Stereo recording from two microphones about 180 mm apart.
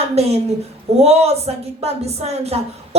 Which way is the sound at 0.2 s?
35° right (ahead or behind).